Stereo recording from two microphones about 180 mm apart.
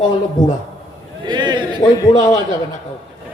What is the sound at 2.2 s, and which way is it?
Speech, 40° left (ahead or behind).